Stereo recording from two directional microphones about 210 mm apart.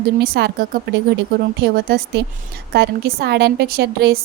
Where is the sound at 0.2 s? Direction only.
50° right (ahead or behind).